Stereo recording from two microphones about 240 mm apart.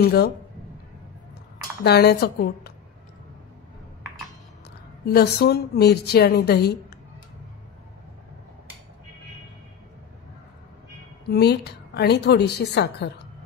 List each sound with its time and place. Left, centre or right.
1.8 s a woman's voice: left
5.0 s a woman's voice: left
11.2 s a woman's voice: left